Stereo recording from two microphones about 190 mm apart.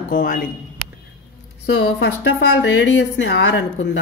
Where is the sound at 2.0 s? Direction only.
60° left (ahead or behind).